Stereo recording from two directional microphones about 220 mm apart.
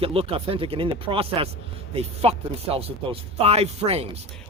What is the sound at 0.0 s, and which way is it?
Speech, 25° right (ahead or behind).